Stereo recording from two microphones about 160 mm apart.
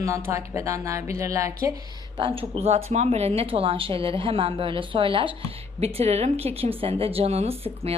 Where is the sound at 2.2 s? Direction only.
35° right (ahead or behind).